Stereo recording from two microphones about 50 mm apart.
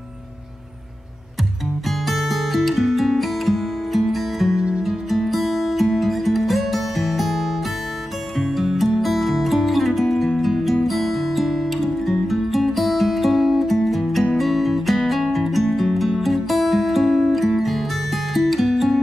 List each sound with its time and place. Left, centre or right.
1.9 s music: centre
4.6 s music: centre
4.8 s music: centre